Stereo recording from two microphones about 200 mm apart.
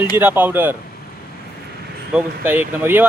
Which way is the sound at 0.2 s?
10° right (ahead or behind).